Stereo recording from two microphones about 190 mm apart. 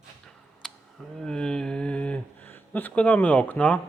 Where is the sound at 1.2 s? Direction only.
5° left (ahead or behind).